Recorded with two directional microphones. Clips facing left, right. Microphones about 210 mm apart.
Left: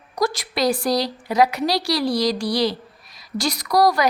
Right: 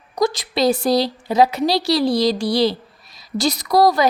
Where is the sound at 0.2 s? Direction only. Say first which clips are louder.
Right 3 dB; 25° right (ahead or behind).